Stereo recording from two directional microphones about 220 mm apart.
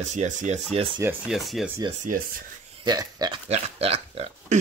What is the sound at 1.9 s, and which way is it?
Speech, 35° right (ahead or behind).